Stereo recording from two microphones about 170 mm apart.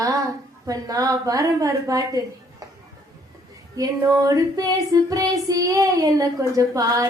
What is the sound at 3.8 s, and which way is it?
Female singing, 20° right (ahead or behind).